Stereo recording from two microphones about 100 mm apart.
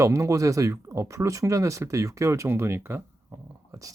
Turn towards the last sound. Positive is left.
turn(degrees=-35)  # may be behind; listen again after turning